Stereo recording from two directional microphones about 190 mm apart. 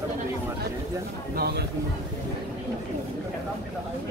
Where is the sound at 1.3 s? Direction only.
55° right (ahead or behind).